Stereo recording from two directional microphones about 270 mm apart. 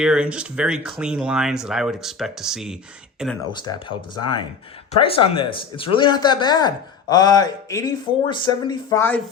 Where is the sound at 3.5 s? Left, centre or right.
Centre.